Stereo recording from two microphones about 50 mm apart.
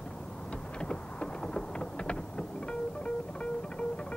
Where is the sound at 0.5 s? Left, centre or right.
Centre.